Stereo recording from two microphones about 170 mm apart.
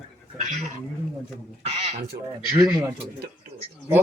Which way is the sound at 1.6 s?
40° right (ahead or behind).